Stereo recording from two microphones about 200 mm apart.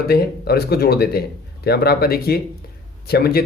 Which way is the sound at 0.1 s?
50° left (ahead or behind).